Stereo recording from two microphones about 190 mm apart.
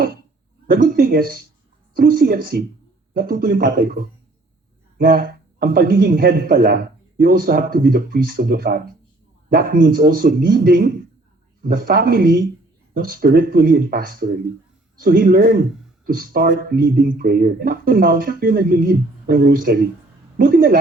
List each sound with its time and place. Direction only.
0.7 s a man's voice: 50° right (ahead or behind)